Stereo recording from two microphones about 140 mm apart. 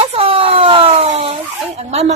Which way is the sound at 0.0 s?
40° right (ahead or behind).